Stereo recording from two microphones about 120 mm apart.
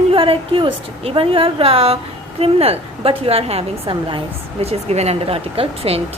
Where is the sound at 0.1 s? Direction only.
50° right (ahead or behind).